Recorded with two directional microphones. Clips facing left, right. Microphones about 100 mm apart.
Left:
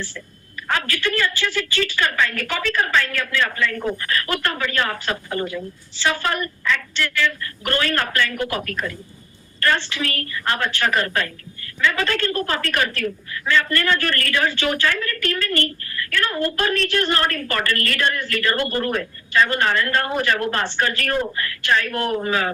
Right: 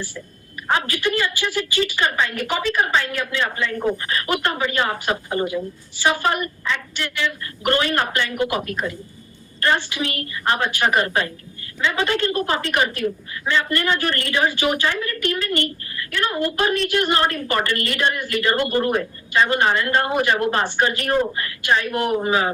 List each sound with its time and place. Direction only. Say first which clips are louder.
0.7 s a woman's voice: right 2 dB; 20° right (ahead or behind)